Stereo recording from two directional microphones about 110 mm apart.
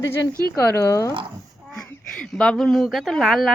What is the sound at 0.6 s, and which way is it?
Speech, 25° left (ahead or behind).